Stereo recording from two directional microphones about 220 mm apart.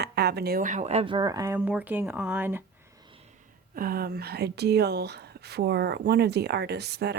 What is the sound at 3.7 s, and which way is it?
Speech, 45° right (ahead or behind).